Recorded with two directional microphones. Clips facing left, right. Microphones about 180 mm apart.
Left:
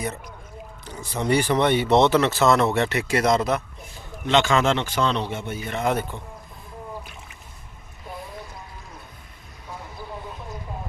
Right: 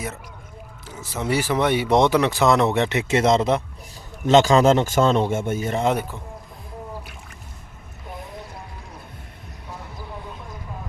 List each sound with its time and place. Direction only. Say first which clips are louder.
0.9 s speech: left 2 dB; 5° right (ahead or behind); by 3.6 s 25° right (ahead or behind)
4.3 s a man's voice: right 5 dB; 40° right (ahead or behind)
5.9 s speech: right 1 dB; 5° right (ahead or behind)